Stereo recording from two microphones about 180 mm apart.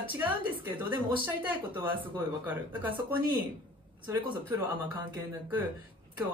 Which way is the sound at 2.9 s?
25° right (ahead or behind).